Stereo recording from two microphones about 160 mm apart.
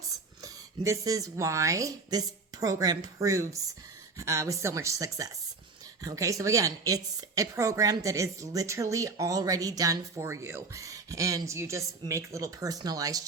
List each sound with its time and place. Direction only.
0.4 s a woman's voice: 20° right (ahead or behind)